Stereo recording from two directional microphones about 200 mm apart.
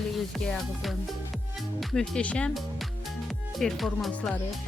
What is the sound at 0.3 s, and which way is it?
Music, centre (ahead or behind).